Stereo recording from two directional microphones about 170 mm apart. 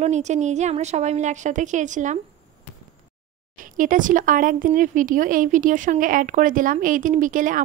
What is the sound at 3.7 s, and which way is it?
A woman's voice, 50° right (ahead or behind).